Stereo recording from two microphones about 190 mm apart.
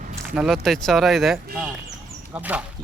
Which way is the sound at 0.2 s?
5° right (ahead or behind).